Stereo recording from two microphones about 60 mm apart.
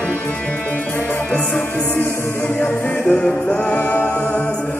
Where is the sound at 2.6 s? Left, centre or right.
Centre.